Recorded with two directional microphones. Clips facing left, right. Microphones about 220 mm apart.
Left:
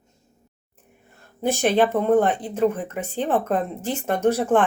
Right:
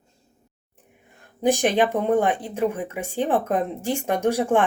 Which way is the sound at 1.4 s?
15° right (ahead or behind).